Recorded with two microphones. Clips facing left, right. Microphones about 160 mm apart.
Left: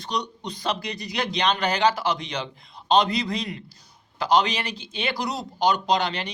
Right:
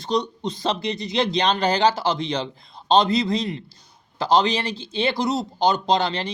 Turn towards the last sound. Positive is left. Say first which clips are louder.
# right 3 dB
turn(degrees=-30)  # may be behind; listen again after turning